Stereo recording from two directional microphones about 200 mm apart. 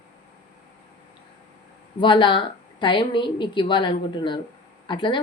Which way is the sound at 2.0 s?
25° left (ahead or behind).